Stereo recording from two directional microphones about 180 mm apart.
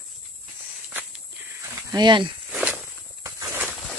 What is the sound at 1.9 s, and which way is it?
Speech, 25° right (ahead or behind).